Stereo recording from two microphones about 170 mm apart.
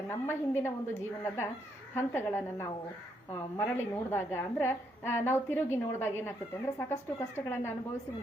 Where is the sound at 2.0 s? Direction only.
15° left (ahead or behind).